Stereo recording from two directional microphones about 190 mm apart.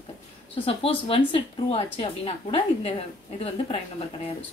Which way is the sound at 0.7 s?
30° left (ahead or behind).